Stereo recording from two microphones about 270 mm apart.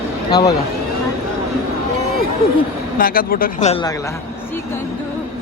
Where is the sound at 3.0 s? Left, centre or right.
Left.